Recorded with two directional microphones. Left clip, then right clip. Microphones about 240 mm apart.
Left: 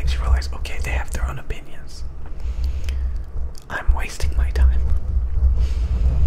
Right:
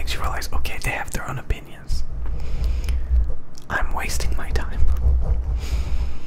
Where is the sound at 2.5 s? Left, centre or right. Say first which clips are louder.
Even; centre.